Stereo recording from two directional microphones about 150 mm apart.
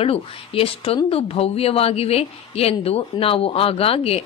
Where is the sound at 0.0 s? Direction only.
40° left (ahead or behind).